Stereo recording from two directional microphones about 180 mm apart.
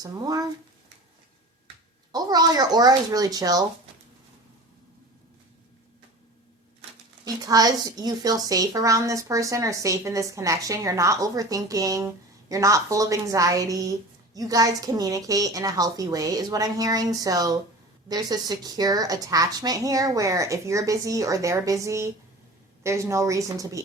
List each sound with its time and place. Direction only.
0.0 s a woman's voice: 20° right (ahead or behind)
2.1 s a woman's voice: 20° right (ahead or behind)
7.4 s a woman's voice: 20° right (ahead or behind)